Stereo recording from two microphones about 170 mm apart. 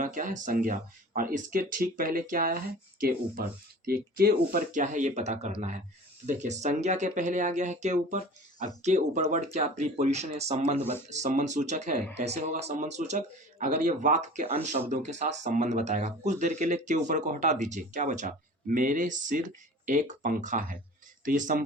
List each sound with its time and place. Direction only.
0.0 s speech: 50° right (ahead or behind)